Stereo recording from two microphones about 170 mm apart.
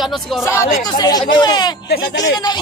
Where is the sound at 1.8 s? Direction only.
75° left (ahead or behind).